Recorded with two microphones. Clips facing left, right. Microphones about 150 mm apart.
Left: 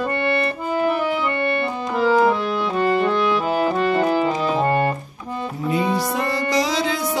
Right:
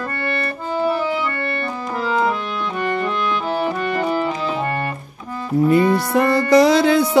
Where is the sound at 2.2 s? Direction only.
25° left (ahead or behind).